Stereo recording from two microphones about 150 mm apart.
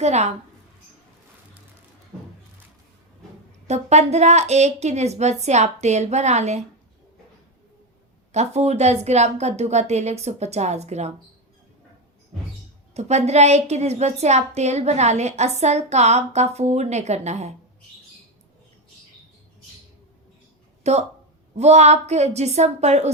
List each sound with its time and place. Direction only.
0.0 s a woman's voice: 50° right (ahead or behind)
3.7 s a woman's voice: 50° right (ahead or behind)
8.3 s a woman's voice: 45° right (ahead or behind)
12.9 s a woman's voice: 50° right (ahead or behind)
20.9 s a woman's voice: 45° right (ahead or behind)